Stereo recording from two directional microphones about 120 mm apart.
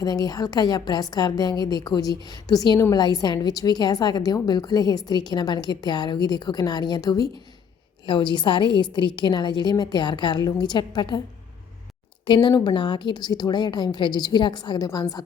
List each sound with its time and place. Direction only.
0.0 s a woman's voice: 30° left (ahead or behind)
12.2 s a woman's voice: 40° left (ahead or behind)